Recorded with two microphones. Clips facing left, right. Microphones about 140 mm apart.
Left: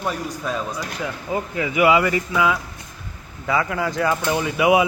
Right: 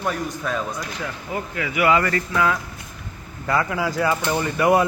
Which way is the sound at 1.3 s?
25° left (ahead or behind).